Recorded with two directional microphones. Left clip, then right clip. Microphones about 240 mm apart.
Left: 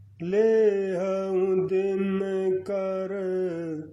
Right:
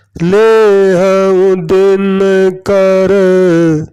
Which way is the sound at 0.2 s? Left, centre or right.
Right.